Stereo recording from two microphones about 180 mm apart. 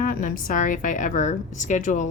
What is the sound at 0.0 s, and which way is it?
Speech, 50° left (ahead or behind).